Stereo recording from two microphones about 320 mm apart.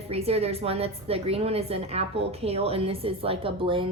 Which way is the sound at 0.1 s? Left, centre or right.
Centre.